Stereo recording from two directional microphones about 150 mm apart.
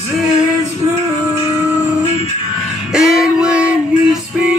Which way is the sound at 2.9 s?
Centre (ahead or behind).